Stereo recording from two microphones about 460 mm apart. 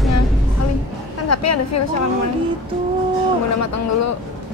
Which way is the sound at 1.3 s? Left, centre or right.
Left.